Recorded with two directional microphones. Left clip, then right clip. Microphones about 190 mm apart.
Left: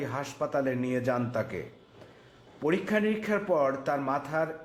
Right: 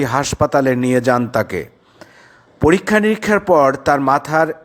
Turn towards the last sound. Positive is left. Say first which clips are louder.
# right 15 dB
turn(degrees=-45)  # may be behind; listen again after turning